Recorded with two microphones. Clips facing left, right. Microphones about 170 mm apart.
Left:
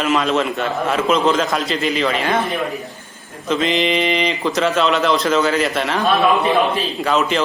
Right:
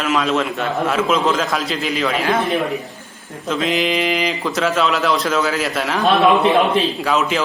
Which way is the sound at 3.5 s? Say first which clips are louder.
Left 1 dB; centre (ahead or behind).